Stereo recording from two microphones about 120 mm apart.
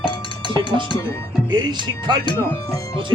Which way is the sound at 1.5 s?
35° right (ahead or behind).